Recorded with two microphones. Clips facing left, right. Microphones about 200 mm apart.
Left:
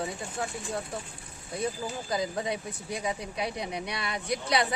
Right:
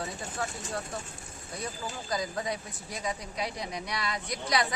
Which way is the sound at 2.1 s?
25° left (ahead or behind).